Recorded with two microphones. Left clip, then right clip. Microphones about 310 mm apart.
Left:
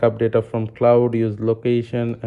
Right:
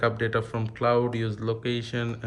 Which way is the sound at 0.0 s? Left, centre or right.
Centre.